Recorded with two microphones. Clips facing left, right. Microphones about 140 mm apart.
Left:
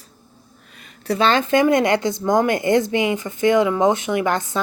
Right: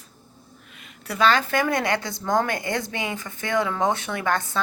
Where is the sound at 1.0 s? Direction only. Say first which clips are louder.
Left 3 dB; 30° left (ahead or behind).